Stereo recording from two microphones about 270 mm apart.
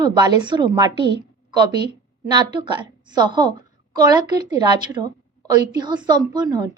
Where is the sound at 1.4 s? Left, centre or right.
Centre.